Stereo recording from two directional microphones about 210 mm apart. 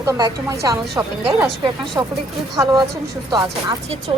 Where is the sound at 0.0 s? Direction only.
15° right (ahead or behind).